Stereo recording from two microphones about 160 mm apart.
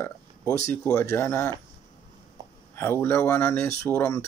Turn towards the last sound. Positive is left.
turn(degrees=15)  # may be behind; listen again after turning